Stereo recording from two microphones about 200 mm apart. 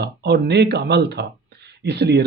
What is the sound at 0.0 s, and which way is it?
Speech, 55° right (ahead or behind).